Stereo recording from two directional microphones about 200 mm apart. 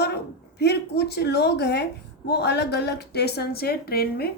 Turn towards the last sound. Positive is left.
turn(degrees=50)  # may be behind; listen again after turning